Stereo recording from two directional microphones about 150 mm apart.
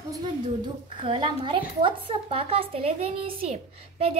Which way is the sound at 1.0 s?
35° right (ahead or behind).